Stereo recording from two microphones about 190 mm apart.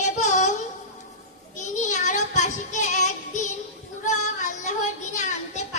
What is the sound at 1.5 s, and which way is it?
Child singing, 40° left (ahead or behind).